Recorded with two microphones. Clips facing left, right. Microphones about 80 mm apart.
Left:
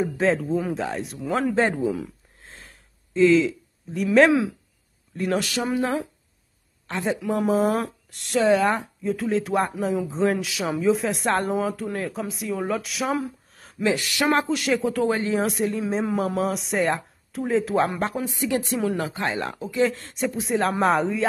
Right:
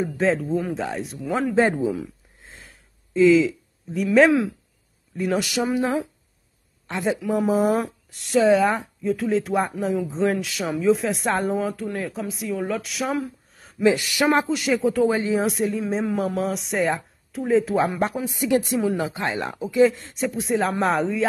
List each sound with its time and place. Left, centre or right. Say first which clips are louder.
0.0 s speech: even; centre
7.0 s speech: right 2 dB; centre
18.3 s speech: right 4 dB; centre
18.7 s speech: right 2 dB; centre
18.9 s speech: right 1 dB; centre